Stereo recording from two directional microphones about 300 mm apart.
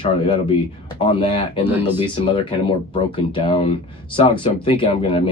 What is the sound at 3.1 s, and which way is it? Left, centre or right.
Speech, centre.